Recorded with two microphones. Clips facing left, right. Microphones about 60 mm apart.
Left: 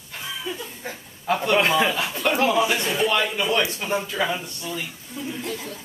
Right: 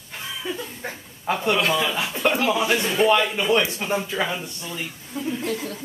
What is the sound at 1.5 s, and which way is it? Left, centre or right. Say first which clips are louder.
Speech: left 5 dB; left.